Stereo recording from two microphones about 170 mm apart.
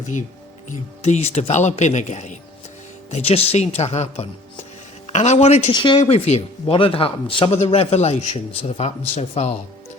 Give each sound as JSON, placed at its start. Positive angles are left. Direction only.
{"t": 0.0, "sound": "speech", "side_deg": 45}
{"t": 5.7, "sound": "speech", "side_deg": 30}